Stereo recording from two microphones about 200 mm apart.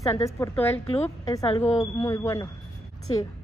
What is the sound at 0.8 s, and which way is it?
Speech, 30° left (ahead or behind).